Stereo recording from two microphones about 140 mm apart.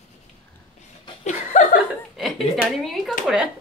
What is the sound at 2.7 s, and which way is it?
Speech, centre (ahead or behind).